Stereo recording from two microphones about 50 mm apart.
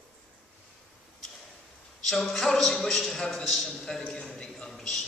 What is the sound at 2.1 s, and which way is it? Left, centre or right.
A man's voice, centre.